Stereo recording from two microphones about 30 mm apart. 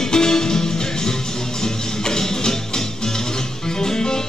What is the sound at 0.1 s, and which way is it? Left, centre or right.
Music, left.